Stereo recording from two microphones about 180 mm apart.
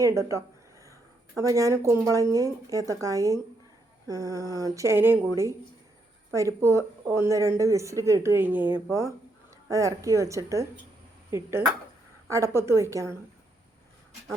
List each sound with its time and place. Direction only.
0.0 s speech: 15° right (ahead or behind)
6.3 s speech: 15° right (ahead or behind)